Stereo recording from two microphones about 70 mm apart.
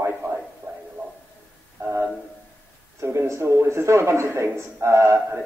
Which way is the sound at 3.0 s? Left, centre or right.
Right.